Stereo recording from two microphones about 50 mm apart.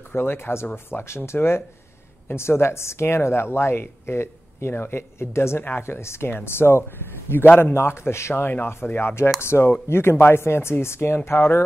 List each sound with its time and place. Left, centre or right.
0.1 s speech: left
7.2 s a man's voice: left
7.7 s speech: left
8.5 s speech: left
9.4 s speech: left